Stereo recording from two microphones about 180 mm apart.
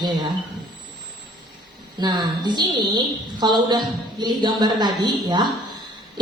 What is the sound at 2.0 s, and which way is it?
A woman's voice, 25° right (ahead or behind).